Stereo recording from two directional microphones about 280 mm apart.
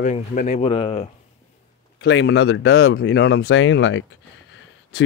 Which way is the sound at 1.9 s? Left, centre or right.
Left.